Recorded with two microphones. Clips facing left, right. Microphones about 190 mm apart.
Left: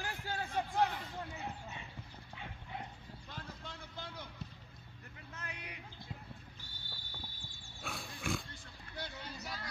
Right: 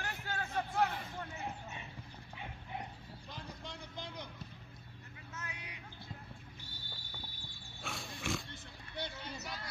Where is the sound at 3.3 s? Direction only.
15° right (ahead or behind).